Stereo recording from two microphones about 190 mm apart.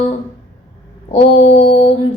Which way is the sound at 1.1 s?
30° left (ahead or behind).